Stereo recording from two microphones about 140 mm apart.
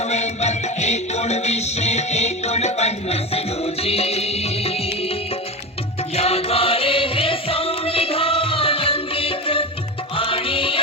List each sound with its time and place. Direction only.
0.1 s music: 55° left (ahead or behind)
6.1 s music: 45° left (ahead or behind)